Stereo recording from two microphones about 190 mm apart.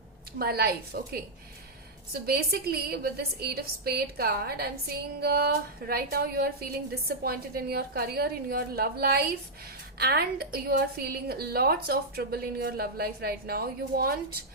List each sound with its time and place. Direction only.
0.3 s a woman's voice: 55° right (ahead or behind)
2.2 s a woman's voice: 55° right (ahead or behind)